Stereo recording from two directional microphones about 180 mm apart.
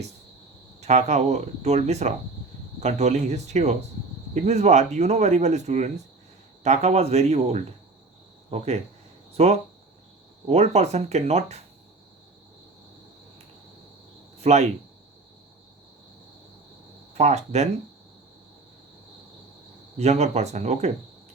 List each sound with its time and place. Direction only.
0.8 s speech: 40° right (ahead or behind)
14.3 s speech: 40° right (ahead or behind)
17.2 s speech: 35° right (ahead or behind)
20.0 s speech: 35° right (ahead or behind)